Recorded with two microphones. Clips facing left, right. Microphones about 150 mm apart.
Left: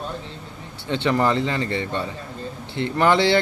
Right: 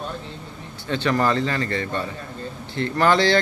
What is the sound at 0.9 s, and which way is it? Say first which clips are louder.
A man's voice: left 1 dB; 20° left (ahead or behind).